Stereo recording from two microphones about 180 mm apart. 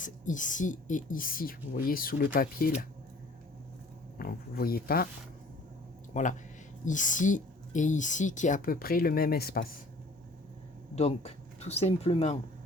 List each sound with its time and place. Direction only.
0.0 s speech: 45° left (ahead or behind)
4.2 s speech: 55° left (ahead or behind)
6.1 s speech: 45° left (ahead or behind)
10.9 s speech: 35° left (ahead or behind)